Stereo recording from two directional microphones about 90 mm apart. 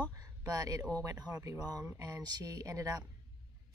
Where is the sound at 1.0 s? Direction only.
40° right (ahead or behind).